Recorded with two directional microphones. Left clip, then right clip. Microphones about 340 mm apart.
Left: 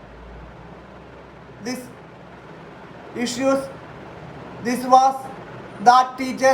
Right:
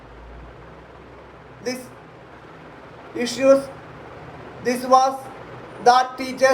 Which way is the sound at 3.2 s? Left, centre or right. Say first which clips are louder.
Right 5 dB; centre.